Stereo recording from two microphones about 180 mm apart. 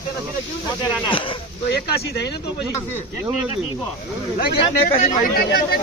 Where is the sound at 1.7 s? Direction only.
65° left (ahead or behind).